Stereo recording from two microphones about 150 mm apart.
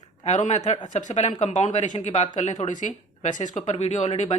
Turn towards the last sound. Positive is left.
turn(degrees=45)  # may be behind; listen again after turning